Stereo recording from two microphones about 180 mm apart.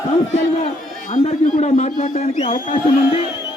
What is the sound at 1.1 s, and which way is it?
A man's voice, 35° left (ahead or behind).